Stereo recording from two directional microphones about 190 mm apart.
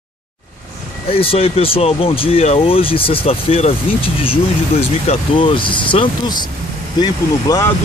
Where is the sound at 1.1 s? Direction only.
30° left (ahead or behind).